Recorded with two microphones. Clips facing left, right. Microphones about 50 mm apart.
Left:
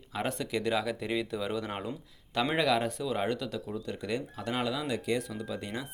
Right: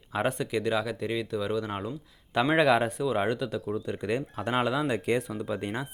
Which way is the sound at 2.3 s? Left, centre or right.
Centre.